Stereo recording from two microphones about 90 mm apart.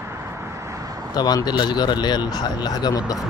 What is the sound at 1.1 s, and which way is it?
Speech, 50° left (ahead or behind).